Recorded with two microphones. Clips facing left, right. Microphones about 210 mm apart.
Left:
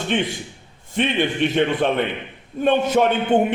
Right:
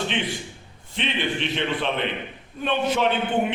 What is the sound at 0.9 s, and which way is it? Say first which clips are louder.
A man's voice: left 7 dB; 50° left (ahead or behind).